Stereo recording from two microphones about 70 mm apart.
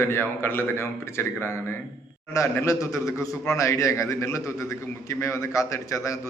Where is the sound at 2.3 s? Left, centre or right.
Left.